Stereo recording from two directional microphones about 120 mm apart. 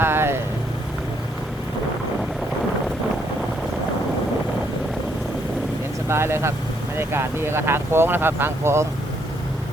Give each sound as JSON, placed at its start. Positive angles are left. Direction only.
{"t": 0.0, "sound": "vehicle", "side_deg": -20}
{"t": 6.1, "sound": "speech", "side_deg": -20}